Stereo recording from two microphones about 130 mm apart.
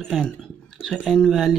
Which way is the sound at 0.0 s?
Centre (ahead or behind).